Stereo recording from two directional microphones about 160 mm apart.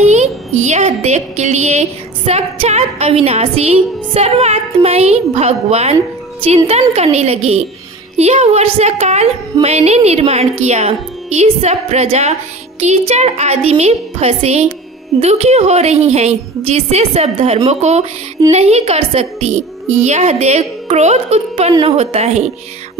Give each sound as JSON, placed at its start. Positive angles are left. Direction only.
{"t": 0.0, "sound": "a woman's voice", "side_deg": -45}